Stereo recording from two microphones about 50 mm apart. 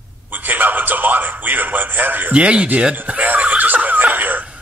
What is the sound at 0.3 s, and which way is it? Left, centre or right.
A man's voice, right.